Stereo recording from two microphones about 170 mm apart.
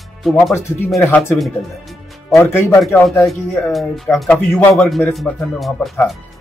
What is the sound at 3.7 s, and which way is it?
Speech, centre (ahead or behind).